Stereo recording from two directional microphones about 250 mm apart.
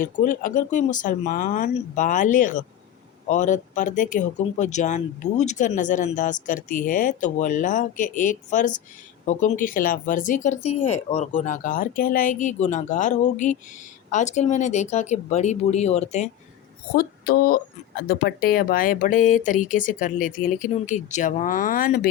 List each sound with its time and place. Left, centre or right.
0.0 s speech: left
16.9 s speech: left